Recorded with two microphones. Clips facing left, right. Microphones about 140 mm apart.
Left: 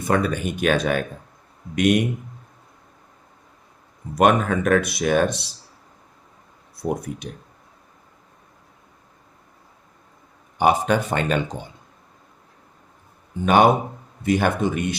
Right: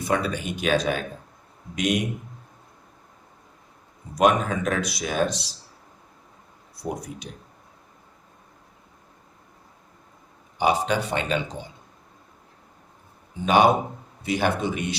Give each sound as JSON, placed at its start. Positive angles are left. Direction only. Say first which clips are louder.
{"t": 0.0, "sound": "speech", "louder": "left 4 dB", "side_deg": 50}
{"t": 4.1, "sound": "speech", "louder": "left 3 dB", "side_deg": 55}
{"t": 6.8, "sound": "speech", "louder": "left 5 dB", "side_deg": 55}
{"t": 10.6, "sound": "speech", "louder": "left 4 dB", "side_deg": 50}
{"t": 13.3, "sound": "speech", "louder": "left 2 dB", "side_deg": 50}